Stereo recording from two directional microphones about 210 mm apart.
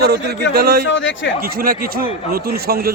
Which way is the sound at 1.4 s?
45° right (ahead or behind).